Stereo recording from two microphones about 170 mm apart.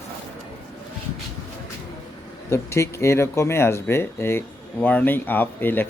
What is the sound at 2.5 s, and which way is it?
Speech, 15° left (ahead or behind).